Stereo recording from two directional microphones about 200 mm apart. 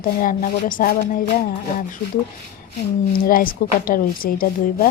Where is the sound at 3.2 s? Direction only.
45° left (ahead or behind).